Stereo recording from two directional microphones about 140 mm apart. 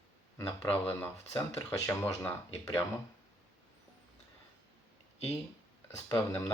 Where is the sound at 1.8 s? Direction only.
15° left (ahead or behind).